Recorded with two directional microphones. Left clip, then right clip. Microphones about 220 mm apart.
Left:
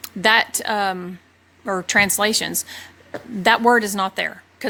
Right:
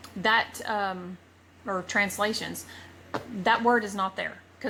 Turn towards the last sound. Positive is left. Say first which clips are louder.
# left 8 dB
turn(degrees=45)  # may be behind; listen again after turning